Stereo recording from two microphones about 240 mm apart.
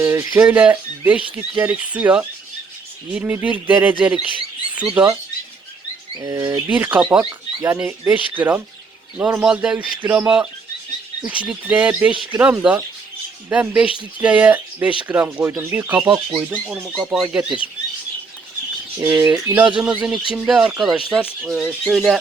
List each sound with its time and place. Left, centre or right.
0.0 s speech: centre
6.2 s speech: centre
12.1 s speech: right
12.4 s speech: centre
19.0 s speech: centre